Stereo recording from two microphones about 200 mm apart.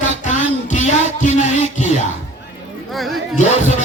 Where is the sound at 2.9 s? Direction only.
Centre (ahead or behind).